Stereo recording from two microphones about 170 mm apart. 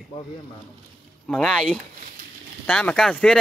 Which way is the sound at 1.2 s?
Centre (ahead or behind).